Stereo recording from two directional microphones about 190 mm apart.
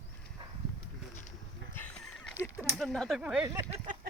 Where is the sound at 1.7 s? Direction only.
5° left (ahead or behind).